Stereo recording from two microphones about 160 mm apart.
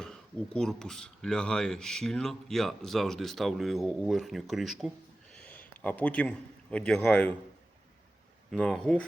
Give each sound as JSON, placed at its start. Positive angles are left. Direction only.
{"t": 0.0, "sound": "a man's voice", "side_deg": 5}
{"t": 8.4, "sound": "speech", "side_deg": 5}